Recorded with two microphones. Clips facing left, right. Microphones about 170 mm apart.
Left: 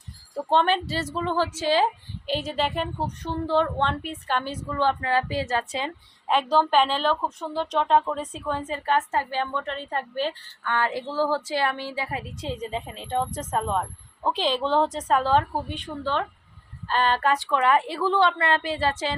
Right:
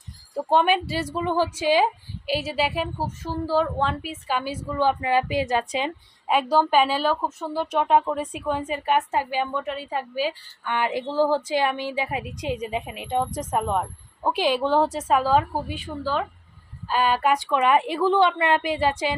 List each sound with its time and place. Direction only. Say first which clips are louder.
0.3 s speech: right 2 dB; 10° right (ahead or behind)